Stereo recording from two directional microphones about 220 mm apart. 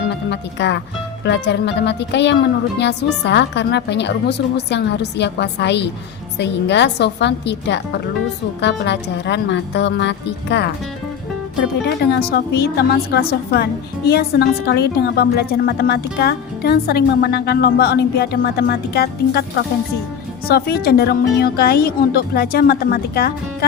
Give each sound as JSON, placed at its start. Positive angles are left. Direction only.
{"t": 0.3, "sound": "a woman's voice", "side_deg": 50}
{"t": 12.3, "sound": "a woman's voice", "side_deg": 45}
{"t": 20.5, "sound": "a woman's voice", "side_deg": 45}